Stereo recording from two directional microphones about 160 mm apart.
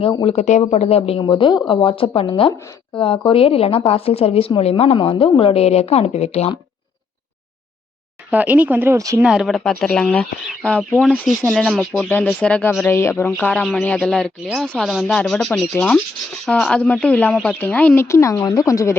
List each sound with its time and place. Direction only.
0.0 s speech: 35° left (ahead or behind)
8.3 s speech: 10° right (ahead or behind)
9.2 s speech: 5° right (ahead or behind)
12.0 s speech: 10° left (ahead or behind)